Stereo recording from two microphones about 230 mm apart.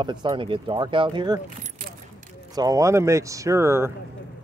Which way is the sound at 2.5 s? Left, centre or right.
Centre.